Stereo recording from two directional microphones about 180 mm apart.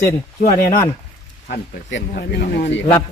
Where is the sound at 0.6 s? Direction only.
15° left (ahead or behind).